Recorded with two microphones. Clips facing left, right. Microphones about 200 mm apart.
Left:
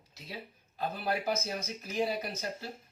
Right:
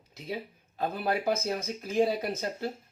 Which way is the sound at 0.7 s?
55° right (ahead or behind).